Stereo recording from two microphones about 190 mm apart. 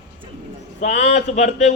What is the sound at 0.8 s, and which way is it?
Speech, 35° left (ahead or behind).